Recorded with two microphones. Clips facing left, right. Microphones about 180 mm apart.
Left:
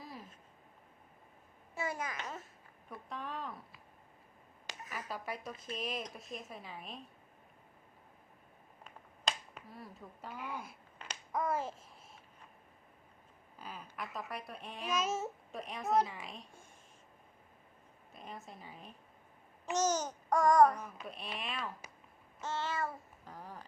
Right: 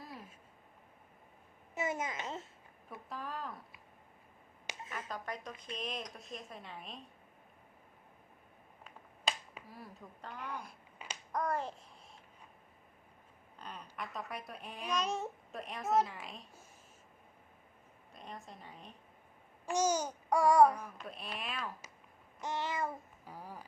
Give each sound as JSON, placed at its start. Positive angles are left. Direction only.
{"t": 1.7, "sound": "babbling", "side_deg": -20}
{"t": 2.9, "sound": "speech", "side_deg": 0}
{"t": 4.9, "sound": "speech", "side_deg": 10}
{"t": 8.8, "sound": "finger snapping", "side_deg": 0}
{"t": 11.3, "sound": "speech", "side_deg": 0}
{"t": 13.6, "sound": "speech", "side_deg": 5}
{"t": 18.1, "sound": "speech", "side_deg": 0}
{"t": 19.7, "sound": "babbling", "side_deg": -10}
{"t": 21.0, "sound": "speech", "side_deg": 0}
{"t": 22.4, "sound": "babbling", "side_deg": -15}